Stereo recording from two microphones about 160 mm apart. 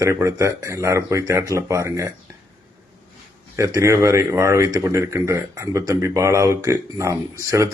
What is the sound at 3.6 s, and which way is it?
Speech, 20° right (ahead or behind).